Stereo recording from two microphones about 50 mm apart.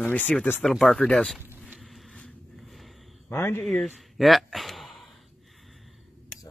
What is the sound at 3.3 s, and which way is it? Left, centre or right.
Speech, left.